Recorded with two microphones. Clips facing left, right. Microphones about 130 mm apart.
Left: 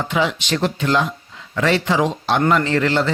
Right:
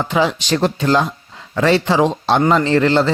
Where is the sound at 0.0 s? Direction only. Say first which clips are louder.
Right 3 dB; 35° right (ahead or behind).